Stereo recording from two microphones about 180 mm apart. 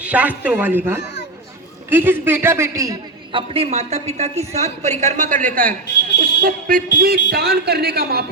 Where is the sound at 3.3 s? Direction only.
30° right (ahead or behind).